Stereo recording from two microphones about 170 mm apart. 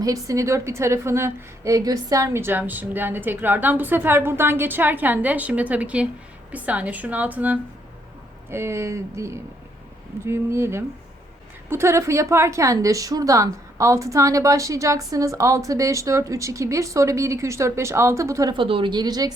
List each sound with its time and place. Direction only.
0.0 s a woman's voice: 20° right (ahead or behind)